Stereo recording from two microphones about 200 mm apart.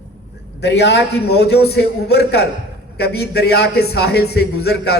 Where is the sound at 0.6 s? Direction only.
60° left (ahead or behind).